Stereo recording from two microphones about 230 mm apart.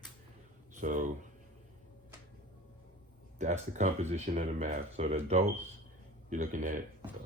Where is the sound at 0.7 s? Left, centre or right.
Right.